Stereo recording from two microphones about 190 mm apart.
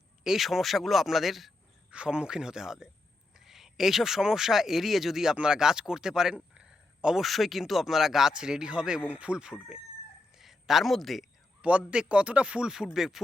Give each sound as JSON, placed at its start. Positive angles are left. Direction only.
{"t": 0.3, "sound": "speech", "side_deg": 0}
{"t": 10.3, "sound": "a sound", "side_deg": 0}
{"t": 11.9, "sound": "speech", "side_deg": -5}